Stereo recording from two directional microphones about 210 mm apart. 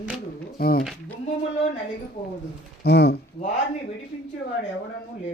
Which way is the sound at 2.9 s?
50° left (ahead or behind).